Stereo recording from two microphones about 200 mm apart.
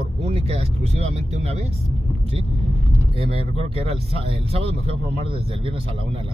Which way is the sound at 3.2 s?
30° right (ahead or behind).